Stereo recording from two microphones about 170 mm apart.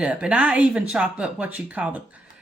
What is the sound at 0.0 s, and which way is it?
Speech, 5° right (ahead or behind).